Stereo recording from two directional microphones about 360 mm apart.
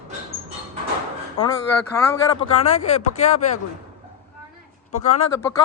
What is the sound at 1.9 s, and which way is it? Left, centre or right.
Speech, centre.